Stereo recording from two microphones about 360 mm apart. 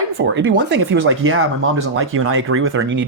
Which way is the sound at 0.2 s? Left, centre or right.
Right.